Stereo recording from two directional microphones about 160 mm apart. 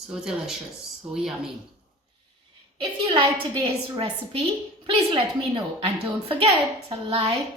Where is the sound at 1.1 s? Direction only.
5° right (ahead or behind).